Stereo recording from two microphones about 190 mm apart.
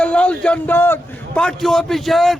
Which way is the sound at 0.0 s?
5° left (ahead or behind).